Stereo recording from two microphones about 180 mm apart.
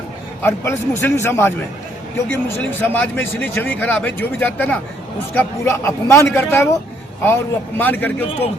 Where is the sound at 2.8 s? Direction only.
10° left (ahead or behind).